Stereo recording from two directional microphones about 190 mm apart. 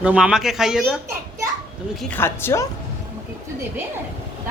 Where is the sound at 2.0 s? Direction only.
10° left (ahead or behind).